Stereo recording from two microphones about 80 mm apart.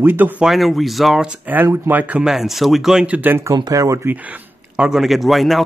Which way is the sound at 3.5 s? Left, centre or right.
Right.